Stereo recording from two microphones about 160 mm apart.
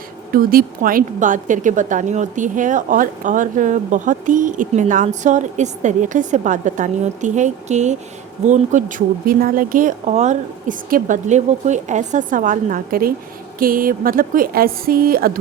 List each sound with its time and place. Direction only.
0.3 s a woman's voice: 60° right (ahead or behind)